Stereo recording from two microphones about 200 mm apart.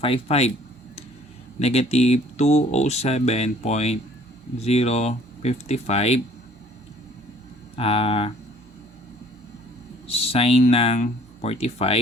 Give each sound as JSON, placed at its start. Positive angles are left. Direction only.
{"t": 0.0, "sound": "speech", "side_deg": 30}
{"t": 1.5, "sound": "speech", "side_deg": 30}
{"t": 7.8, "sound": "speech", "side_deg": 30}
{"t": 10.1, "sound": "speech", "side_deg": 30}